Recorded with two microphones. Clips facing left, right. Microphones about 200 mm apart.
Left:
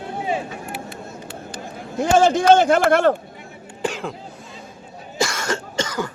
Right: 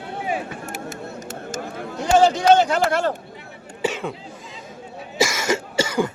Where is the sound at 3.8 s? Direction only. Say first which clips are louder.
Right 1 dB; 5° right (ahead or behind).